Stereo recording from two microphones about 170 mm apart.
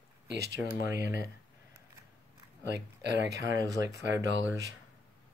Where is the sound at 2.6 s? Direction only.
90° right.